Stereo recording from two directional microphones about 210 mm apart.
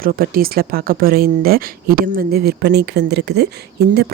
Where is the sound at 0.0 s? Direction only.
45° right (ahead or behind).